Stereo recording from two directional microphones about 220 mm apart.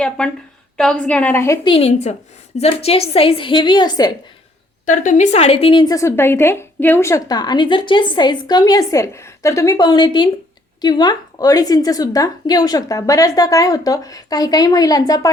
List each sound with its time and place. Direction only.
0.2 s a woman's voice: 5° left (ahead or behind)
1.6 s a woman's voice: 25° left (ahead or behind)
4.9 s a woman's voice: 35° left (ahead or behind); by 15.3 s 15° left (ahead or behind)